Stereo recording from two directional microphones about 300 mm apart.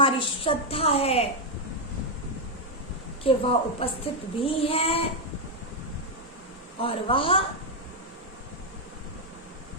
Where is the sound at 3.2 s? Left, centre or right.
Centre.